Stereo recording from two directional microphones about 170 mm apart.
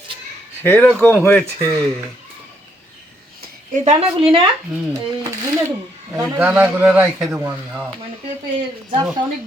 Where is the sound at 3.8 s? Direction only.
35° right (ahead or behind).